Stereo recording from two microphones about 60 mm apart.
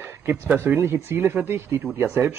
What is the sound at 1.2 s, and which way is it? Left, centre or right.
Speech, right.